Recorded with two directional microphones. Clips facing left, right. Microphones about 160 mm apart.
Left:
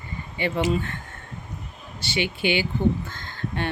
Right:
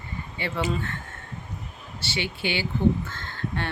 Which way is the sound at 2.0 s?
15° left (ahead or behind).